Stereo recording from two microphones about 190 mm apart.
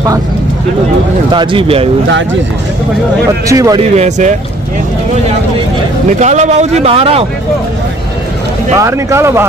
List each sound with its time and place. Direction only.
1.3 s speech: 25° right (ahead or behind)
3.4 s speech: 15° right (ahead or behind)
3.9 s a man's voice: 40° right (ahead or behind)
6.1 s a man's voice: 35° right (ahead or behind)
8.7 s speech: 15° right (ahead or behind)